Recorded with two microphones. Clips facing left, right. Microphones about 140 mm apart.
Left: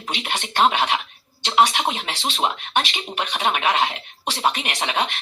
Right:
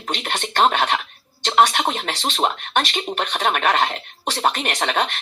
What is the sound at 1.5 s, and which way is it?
Speech, 50° right (ahead or behind).